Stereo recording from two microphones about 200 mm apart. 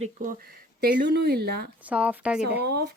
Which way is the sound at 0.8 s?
50° right (ahead or behind).